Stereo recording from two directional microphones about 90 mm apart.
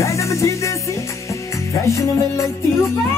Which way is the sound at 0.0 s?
35° left (ahead or behind).